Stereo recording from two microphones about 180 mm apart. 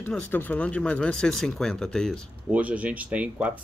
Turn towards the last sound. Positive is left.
turn(degrees=-10)  # may be behind; listen again after turning